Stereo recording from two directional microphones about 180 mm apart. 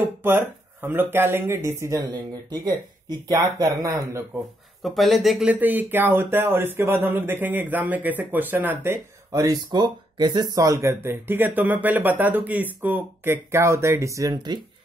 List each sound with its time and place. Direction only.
0.2 s speech: 10° right (ahead or behind)
4.8 s speech: centre (ahead or behind); by 14.6 s 25° right (ahead or behind)